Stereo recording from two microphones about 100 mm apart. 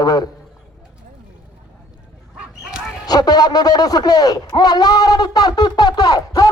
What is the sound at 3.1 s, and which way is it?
Speech, 40° left (ahead or behind).